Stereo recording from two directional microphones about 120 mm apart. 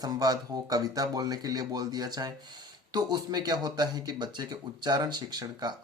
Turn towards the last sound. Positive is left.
turn(degrees=-35)  # may be behind; listen again after turning